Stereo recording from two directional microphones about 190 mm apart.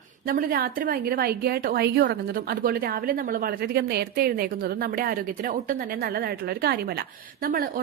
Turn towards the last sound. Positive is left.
turn(degrees=-55)  # may be behind; listen again after turning